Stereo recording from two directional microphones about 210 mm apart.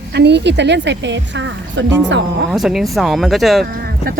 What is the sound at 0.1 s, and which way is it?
A woman's voice, 55° right (ahead or behind).